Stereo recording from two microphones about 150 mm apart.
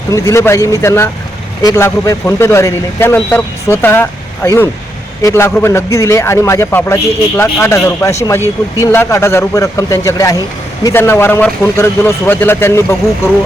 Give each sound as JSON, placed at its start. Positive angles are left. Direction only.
{"t": 0.1, "sound": "a man's voice", "side_deg": 20}